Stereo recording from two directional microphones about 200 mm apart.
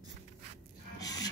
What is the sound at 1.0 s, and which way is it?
Rub, 20° left (ahead or behind).